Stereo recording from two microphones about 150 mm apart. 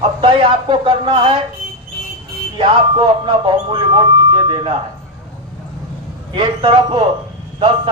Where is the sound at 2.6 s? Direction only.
35° right (ahead or behind).